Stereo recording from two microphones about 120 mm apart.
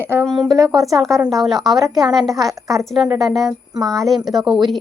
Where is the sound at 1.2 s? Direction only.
Centre (ahead or behind).